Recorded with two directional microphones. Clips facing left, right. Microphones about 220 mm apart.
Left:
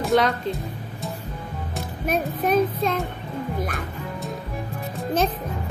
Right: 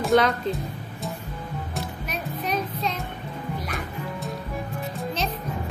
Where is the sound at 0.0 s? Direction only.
Centre (ahead or behind).